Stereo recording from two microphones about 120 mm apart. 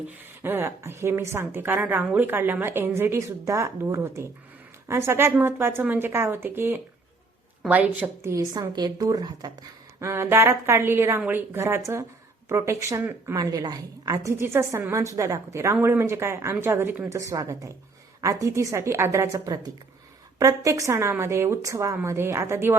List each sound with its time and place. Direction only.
0.4 s a woman's voice: 20° right (ahead or behind)
8.3 s a woman's voice: 35° right (ahead or behind)
10.0 s a woman's voice: 20° right (ahead or behind)
13.3 s a woman's voice: 30° right (ahead or behind)